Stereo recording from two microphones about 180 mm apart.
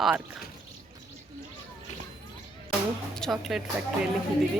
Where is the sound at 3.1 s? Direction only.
Centre (ahead or behind).